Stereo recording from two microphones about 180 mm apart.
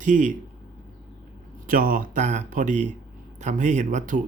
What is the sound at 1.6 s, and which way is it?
Speech, 50° right (ahead or behind).